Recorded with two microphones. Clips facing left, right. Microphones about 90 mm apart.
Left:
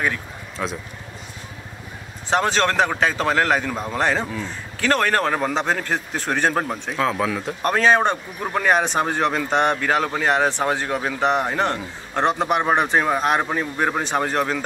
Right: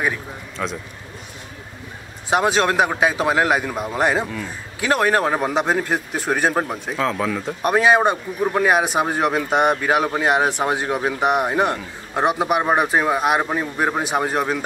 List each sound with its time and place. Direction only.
0.6 s speech: 5° left (ahead or behind)
2.2 s speech: 10° right (ahead or behind)
7.6 s speech: 10° right (ahead or behind)